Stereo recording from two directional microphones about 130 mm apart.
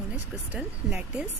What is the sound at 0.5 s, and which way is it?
Speech, 10° right (ahead or behind).